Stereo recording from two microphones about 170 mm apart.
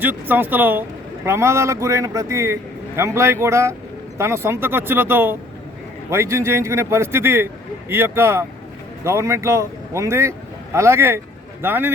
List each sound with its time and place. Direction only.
0.0 s a man's voice: 10° right (ahead or behind)